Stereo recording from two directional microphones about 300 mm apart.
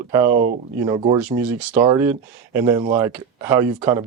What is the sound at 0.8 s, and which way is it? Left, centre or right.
Speech, centre.